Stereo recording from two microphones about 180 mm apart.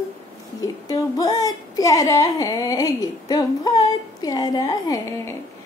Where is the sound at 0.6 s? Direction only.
20° left (ahead or behind).